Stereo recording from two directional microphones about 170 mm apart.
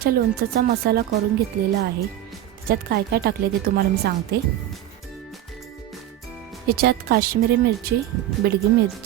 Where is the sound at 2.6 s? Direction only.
60° right (ahead or behind).